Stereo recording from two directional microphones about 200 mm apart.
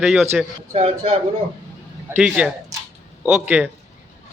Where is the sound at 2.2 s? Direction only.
5° right (ahead or behind).